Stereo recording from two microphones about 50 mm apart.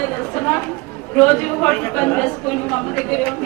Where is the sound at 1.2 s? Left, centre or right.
Left.